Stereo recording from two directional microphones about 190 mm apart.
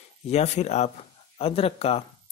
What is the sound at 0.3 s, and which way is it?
Speech, 35° left (ahead or behind).